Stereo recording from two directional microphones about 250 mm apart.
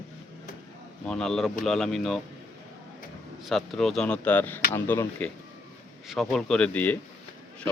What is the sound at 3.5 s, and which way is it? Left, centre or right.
Speech, centre.